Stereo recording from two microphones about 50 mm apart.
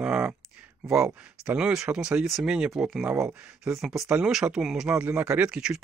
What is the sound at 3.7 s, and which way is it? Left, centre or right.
Speech, centre.